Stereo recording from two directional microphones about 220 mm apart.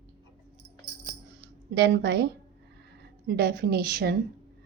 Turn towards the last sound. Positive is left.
turn(degrees=-45)  # may be behind; listen again after turning